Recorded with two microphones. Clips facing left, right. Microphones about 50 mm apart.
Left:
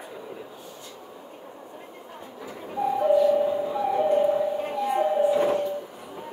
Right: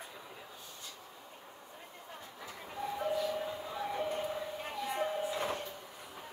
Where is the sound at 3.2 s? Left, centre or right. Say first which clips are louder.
Left 15 dB; left.